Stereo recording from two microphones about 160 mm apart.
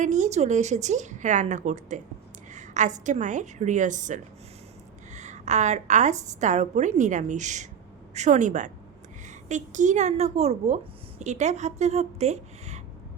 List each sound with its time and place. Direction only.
0.0 s a woman's voice: 45° right (ahead or behind)